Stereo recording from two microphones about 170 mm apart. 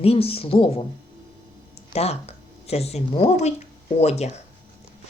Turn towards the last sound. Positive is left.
turn(degrees=40)  # may be behind; listen again after turning